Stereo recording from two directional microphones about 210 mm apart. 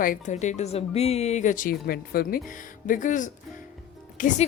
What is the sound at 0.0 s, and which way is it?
A woman's voice, 40° left (ahead or behind).